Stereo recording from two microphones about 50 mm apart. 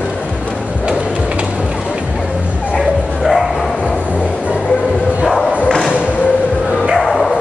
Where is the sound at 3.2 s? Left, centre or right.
Centre.